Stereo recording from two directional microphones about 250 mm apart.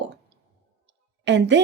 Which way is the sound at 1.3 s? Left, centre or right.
Right.